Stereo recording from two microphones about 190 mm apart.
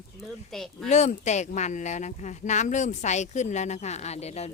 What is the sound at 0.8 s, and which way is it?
Speech, 40° left (ahead or behind).